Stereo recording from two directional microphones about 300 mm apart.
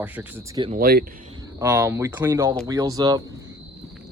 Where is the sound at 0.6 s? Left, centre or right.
Right.